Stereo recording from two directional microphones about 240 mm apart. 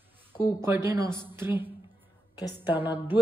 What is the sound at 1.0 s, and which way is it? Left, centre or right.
Music, centre.